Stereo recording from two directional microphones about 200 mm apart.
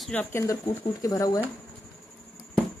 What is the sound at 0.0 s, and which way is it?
Speech, 5° left (ahead or behind).